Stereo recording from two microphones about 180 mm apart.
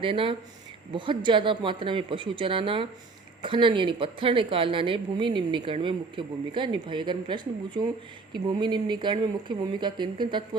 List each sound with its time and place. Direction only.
0.0 s a woman's voice: 30° right (ahead or behind)